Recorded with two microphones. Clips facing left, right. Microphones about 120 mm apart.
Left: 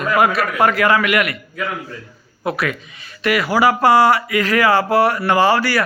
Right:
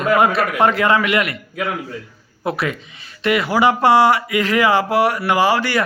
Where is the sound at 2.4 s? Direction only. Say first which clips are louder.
Even; 25° right (ahead or behind).